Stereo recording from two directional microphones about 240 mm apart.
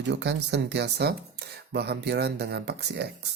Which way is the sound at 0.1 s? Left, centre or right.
Right.